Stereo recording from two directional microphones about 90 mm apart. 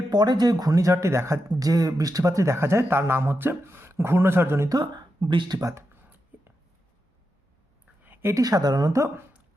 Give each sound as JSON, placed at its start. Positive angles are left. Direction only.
{"t": 0.1, "sound": "speech", "side_deg": -50}
{"t": 4.7, "sound": "speech", "side_deg": -55}
{"t": 5.5, "sound": "speech", "side_deg": -35}
{"t": 8.0, "sound": "a sound", "side_deg": -25}
{"t": 8.4, "sound": "a woman's voice", "side_deg": -45}